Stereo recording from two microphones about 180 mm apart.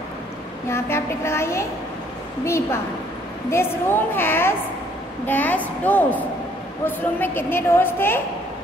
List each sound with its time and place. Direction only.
0.7 s a woman's voice: 15° left (ahead or behind)